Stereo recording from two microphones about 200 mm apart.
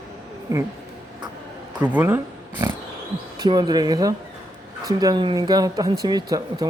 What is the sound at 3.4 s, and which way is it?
Speech, 20° right (ahead or behind).